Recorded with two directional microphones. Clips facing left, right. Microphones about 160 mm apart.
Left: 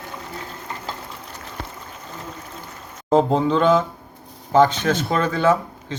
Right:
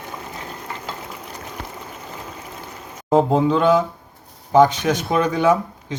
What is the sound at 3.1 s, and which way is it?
Speech, 5° right (ahead or behind).